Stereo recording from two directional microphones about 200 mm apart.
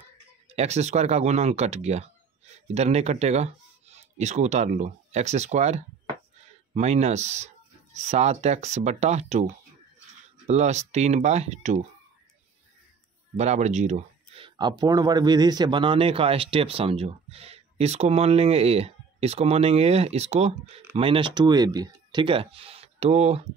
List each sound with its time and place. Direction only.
0.6 s speech: 35° right (ahead or behind)
13.4 s speech: 35° right (ahead or behind)